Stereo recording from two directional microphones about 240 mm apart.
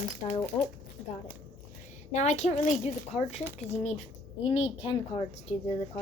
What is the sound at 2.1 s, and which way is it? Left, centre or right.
A child's voice, left.